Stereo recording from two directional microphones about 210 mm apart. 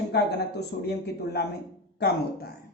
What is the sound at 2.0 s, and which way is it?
Speech, 50° left (ahead or behind).